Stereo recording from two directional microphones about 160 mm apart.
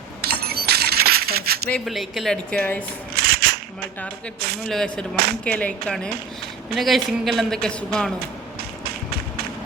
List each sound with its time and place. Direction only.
0.2 s coin: 80° right
1.7 s a man's voice: centre (ahead or behind)
3.2 s a sound: 75° right (ahead or behind)
4.6 s a man's voice: 5° left (ahead or behind)